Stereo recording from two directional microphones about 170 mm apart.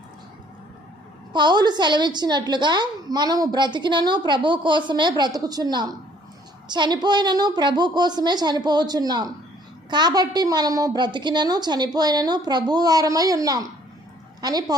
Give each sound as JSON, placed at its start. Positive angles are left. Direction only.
{"t": 1.3, "sound": "a woman's voice", "side_deg": -25}